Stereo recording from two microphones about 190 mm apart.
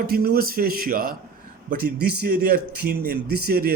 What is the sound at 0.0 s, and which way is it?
A man's voice, 55° right (ahead or behind).